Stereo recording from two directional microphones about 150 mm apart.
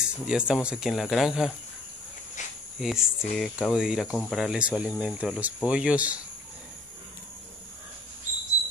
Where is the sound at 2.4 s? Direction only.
55° left (ahead or behind).